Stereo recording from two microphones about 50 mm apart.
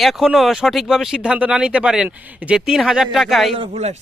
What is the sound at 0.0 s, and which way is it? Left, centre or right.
Speech, centre.